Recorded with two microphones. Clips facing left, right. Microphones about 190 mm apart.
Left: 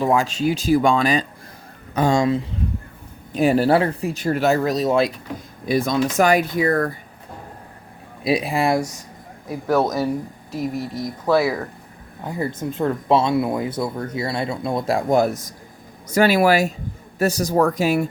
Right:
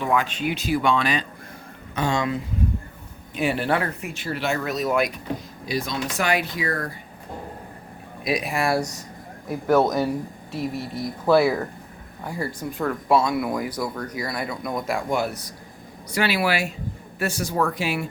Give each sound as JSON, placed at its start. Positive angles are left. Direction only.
{"t": 0.0, "sound": "speech", "side_deg": 35}
{"t": 5.6, "sound": "speech", "side_deg": 50}
{"t": 8.2, "sound": "speech", "side_deg": 30}
{"t": 9.5, "sound": "a man's voice", "side_deg": 0}
{"t": 12.2, "sound": "speech", "side_deg": 20}